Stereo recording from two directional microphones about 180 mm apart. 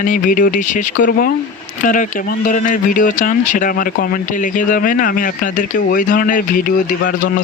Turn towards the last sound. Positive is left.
turn(degrees=50)  # may be behind; listen again after turning